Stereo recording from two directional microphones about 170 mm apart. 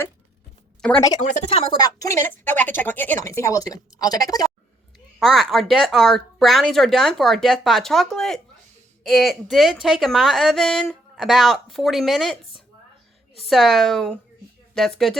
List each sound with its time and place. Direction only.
0.8 s speech: 5° left (ahead or behind)
1.2 s a woman's voice: 45° left (ahead or behind)
1.8 s a woman's voice: 20° left (ahead or behind)
5.2 s a woman's voice: centre (ahead or behind)
13.5 s a woman's voice: centre (ahead or behind)